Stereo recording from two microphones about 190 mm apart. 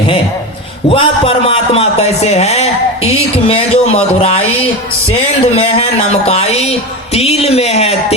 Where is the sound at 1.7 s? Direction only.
35° left (ahead or behind).